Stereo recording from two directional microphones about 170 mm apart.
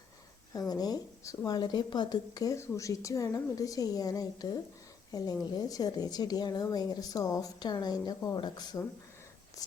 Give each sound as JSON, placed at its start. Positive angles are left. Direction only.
{"t": 0.7, "sound": "speech", "side_deg": 20}